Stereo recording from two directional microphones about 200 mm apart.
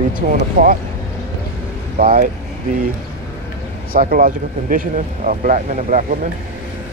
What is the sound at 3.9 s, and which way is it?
Speech, 45° right (ahead or behind).